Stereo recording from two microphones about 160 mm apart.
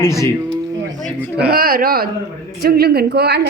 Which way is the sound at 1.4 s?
70° right (ahead or behind).